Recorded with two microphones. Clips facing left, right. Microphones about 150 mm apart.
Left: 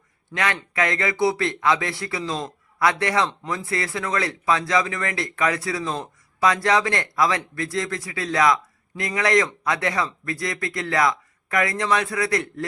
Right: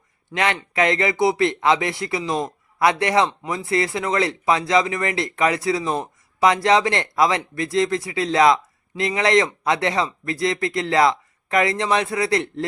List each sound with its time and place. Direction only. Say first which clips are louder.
0.3 s speech: right 3 dB; 20° right (ahead or behind)